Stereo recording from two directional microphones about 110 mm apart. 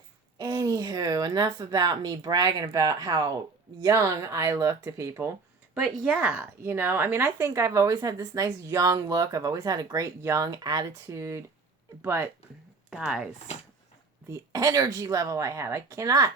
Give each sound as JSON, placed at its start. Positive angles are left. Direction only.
{"t": 0.3, "sound": "a woman's voice", "side_deg": -35}
{"t": 3.8, "sound": "speech", "side_deg": -25}
{"t": 5.9, "sound": "speech", "side_deg": -5}
{"t": 12.9, "sound": "speech", "side_deg": -5}
{"t": 14.3, "sound": "a woman's voice", "side_deg": -30}